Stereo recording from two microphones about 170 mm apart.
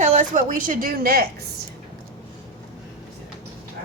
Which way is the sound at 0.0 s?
45° right (ahead or behind).